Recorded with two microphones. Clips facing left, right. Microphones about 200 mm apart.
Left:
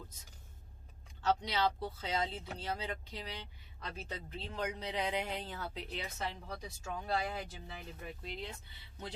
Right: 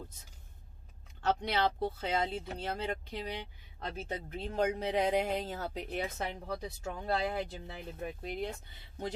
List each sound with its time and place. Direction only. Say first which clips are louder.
1.2 s speech: right 2 dB; 55° right (ahead or behind)